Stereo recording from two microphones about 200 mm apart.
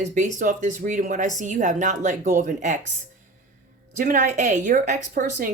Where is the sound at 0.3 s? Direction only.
40° right (ahead or behind).